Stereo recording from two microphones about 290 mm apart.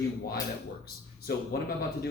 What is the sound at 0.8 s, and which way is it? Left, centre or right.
Speech, left.